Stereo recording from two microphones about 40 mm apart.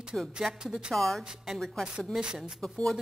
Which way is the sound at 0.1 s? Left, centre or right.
Centre.